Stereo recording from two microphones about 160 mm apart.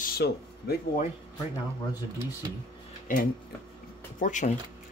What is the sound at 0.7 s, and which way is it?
Speech, 90° left.